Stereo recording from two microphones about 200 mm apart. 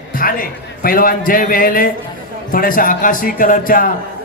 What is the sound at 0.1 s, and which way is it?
A man's voice, 45° left (ahead or behind).